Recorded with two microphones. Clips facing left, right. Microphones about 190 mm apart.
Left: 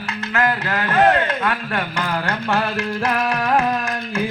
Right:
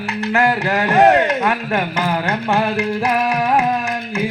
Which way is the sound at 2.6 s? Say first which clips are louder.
Right 4 dB; 15° right (ahead or behind).